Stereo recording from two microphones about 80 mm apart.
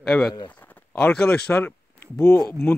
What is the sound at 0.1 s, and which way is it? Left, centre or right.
Speech, left.